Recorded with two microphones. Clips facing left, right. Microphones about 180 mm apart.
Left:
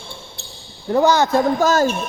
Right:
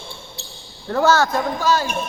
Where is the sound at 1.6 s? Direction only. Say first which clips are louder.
Left 1 dB; 45° left (ahead or behind).